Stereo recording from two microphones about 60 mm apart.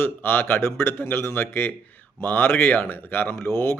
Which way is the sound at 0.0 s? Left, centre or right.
Left.